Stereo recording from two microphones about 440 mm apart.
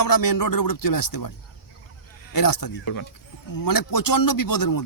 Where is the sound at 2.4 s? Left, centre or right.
Left.